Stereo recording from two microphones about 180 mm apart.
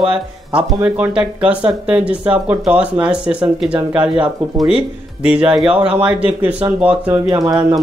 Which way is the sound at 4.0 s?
30° right (ahead or behind).